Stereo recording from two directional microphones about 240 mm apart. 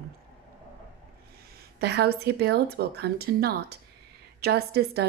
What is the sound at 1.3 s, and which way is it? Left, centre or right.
A woman's voice, right.